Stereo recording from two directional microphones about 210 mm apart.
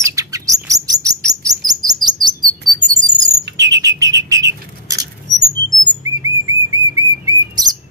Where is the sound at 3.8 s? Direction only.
15° right (ahead or behind).